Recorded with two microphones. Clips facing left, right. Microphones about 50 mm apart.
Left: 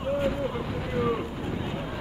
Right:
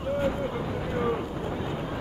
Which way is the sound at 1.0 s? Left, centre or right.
Centre.